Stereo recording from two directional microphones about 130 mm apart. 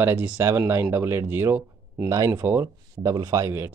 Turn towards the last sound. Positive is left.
turn(degrees=-20)  # may be behind; listen again after turning